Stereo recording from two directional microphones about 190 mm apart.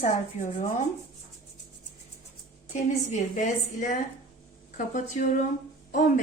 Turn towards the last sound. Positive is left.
turn(degrees=45)  # may be behind; listen again after turning